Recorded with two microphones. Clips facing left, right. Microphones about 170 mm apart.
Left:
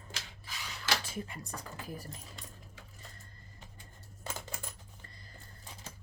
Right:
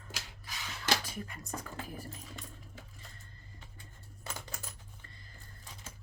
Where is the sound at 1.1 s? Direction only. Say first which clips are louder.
Left 2 dB; 25° left (ahead or behind).